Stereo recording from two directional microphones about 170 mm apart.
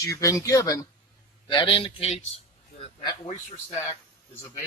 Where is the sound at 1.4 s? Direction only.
30° left (ahead or behind).